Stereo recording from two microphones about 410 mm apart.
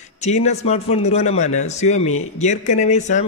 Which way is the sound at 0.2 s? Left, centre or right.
Centre.